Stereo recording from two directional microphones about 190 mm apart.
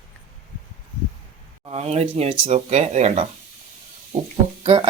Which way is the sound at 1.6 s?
35° right (ahead or behind).